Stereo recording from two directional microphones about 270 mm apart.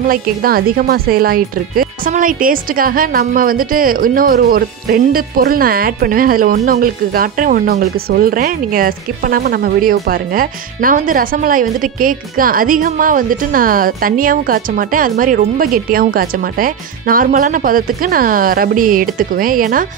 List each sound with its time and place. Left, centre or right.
0.1 s speech: right